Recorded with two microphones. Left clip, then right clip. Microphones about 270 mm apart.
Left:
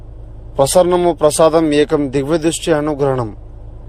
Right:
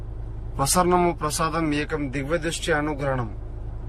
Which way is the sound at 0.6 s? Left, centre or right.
Centre.